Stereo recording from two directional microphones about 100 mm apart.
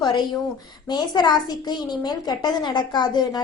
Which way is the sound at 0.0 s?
45° left (ahead or behind).